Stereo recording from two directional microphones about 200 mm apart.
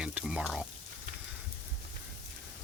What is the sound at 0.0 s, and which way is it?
Frying, 5° right (ahead or behind).